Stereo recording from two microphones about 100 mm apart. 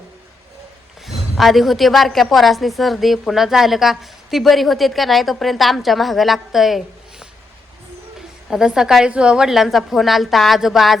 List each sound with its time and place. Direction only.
1.0 s a man's voice: centre (ahead or behind)
8.4 s a woman's voice: 5° right (ahead or behind)